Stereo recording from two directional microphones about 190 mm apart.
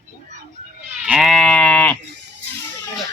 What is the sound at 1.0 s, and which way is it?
Sheep, centre (ahead or behind).